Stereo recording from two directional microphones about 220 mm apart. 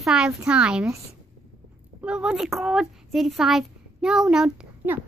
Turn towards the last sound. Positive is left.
turn(degrees=-5)  # may be behind; listen again after turning